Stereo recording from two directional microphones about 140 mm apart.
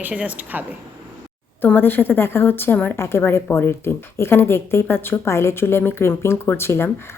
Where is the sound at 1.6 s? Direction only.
15° left (ahead or behind).